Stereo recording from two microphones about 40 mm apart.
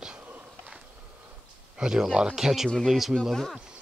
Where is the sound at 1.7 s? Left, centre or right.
Centre.